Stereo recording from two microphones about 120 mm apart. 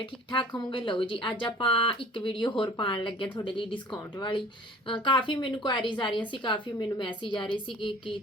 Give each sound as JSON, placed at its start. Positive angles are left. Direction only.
{"t": 0.0, "sound": "speech", "side_deg": 45}